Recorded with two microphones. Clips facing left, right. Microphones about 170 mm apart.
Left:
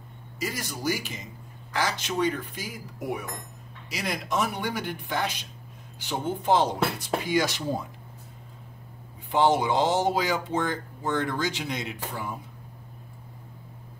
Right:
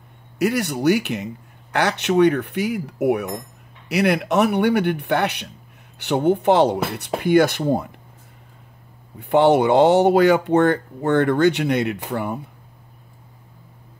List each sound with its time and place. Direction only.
0.4 s speech: 65° right (ahead or behind)
9.3 s speech: 60° right (ahead or behind)